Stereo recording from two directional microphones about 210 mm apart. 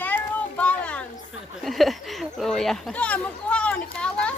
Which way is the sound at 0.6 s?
5° left (ahead or behind).